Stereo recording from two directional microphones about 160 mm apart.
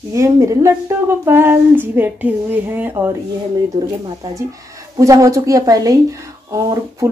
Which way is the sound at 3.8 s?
30° right (ahead or behind).